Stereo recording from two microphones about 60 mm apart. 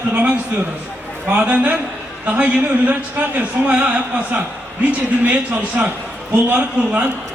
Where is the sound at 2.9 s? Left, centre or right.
Right.